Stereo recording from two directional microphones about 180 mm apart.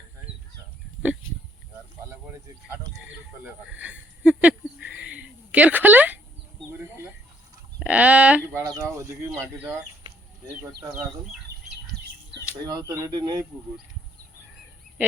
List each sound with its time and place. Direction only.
3.4 s a sound: 5° right (ahead or behind)
7.8 s speech: 5° right (ahead or behind)
12.9 s speech: 20° right (ahead or behind)